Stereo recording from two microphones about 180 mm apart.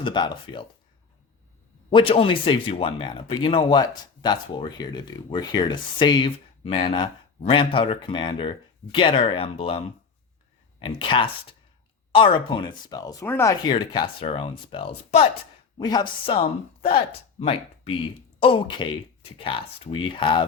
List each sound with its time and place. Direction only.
0.0 s speech: 25° left (ahead or behind)
1.9 s speech: 30° left (ahead or behind)
15.8 s speech: 25° left (ahead or behind)